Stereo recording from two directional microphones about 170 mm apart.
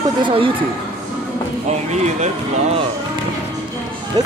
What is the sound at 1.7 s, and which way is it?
Speech, 40° right (ahead or behind).